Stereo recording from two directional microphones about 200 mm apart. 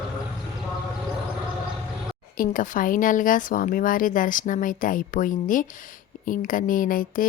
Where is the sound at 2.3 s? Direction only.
45° left (ahead or behind).